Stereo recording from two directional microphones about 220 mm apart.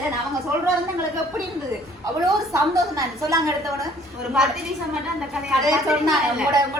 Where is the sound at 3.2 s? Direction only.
15° right (ahead or behind).